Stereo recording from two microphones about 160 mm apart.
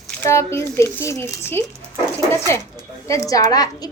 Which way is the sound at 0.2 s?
15° left (ahead or behind).